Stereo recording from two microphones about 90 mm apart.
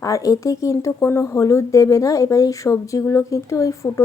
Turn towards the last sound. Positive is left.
turn(degrees=35)  # may be behind; listen again after turning